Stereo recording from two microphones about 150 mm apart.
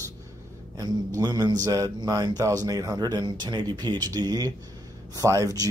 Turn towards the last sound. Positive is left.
turn(degrees=-20)  # may be behind; listen again after turning